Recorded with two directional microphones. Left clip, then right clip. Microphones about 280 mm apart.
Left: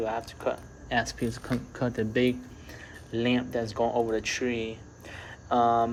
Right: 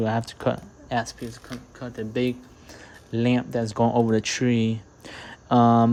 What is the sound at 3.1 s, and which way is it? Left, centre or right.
Speech, right.